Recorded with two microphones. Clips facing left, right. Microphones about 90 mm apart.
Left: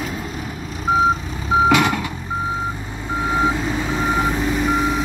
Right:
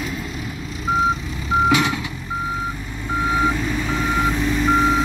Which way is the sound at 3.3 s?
20° left (ahead or behind).